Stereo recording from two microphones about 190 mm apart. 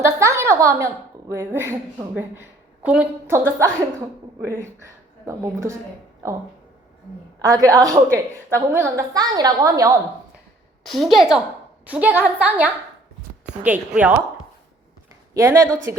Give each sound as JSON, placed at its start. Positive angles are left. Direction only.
{"t": 0.0, "sound": "a woman's voice", "side_deg": -15}
{"t": 7.3, "sound": "a woman's voice", "side_deg": -20}
{"t": 10.8, "sound": "a woman's voice", "side_deg": 0}
{"t": 15.3, "sound": "a woman's voice", "side_deg": -15}